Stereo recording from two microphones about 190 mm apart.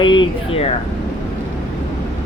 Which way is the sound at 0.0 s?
25° left (ahead or behind).